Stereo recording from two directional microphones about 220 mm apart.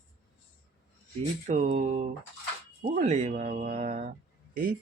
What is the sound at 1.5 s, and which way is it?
Speech, 35° right (ahead or behind).